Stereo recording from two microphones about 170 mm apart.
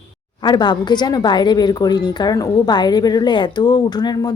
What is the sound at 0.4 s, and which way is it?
A woman's voice, 25° left (ahead or behind).